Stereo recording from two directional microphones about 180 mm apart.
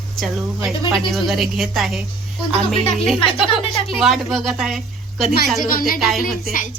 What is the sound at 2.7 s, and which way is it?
Speech, 35° left (ahead or behind).